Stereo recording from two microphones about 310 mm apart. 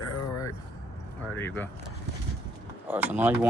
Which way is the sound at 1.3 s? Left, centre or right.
Centre.